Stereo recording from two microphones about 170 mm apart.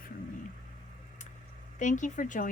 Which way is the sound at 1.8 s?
45° left (ahead or behind).